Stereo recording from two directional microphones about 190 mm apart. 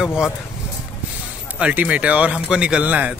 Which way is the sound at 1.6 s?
5° right (ahead or behind).